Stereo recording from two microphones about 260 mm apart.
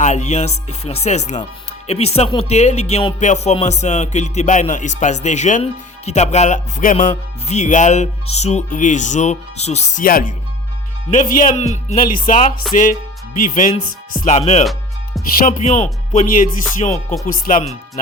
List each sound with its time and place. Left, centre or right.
0.0 s music: left
14.6 s music: centre
15.4 s music: left
17.2 s speech: left